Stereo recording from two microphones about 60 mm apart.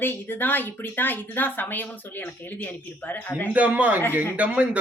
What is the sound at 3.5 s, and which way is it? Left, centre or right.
A man's voice, right.